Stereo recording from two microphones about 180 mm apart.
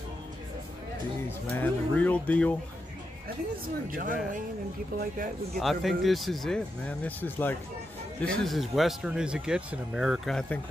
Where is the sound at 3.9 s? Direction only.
50° right (ahead or behind).